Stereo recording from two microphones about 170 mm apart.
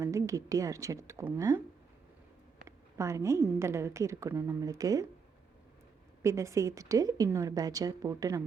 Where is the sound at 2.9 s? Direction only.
15° right (ahead or behind).